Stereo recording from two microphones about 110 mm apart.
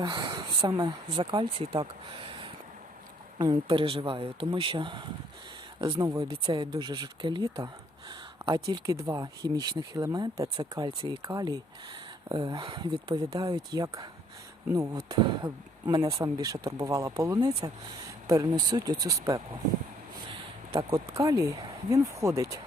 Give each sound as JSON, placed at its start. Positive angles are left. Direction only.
{"t": 0.0, "sound": "speech", "side_deg": -50}
{"t": 1.2, "sound": "speech", "side_deg": -50}
{"t": 3.3, "sound": "speech", "side_deg": -45}
{"t": 11.3, "sound": "speech", "side_deg": -35}
{"t": 20.9, "sound": "speech", "side_deg": -35}